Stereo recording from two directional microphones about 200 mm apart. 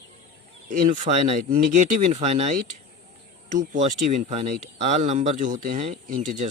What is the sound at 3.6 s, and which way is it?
Speech, 40° right (ahead or behind).